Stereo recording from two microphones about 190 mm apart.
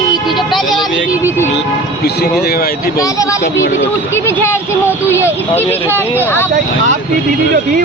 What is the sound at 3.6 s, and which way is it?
Speech, 70° left (ahead or behind).